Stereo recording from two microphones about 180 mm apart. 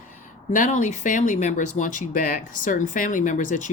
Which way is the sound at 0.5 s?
45° left (ahead or behind).